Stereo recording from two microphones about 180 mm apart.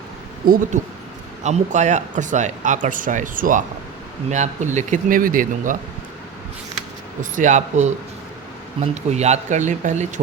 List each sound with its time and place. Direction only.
0.4 s speech: 50° right (ahead or behind)
1.5 s speech: 40° right (ahead or behind)
7.2 s speech: 45° right (ahead or behind)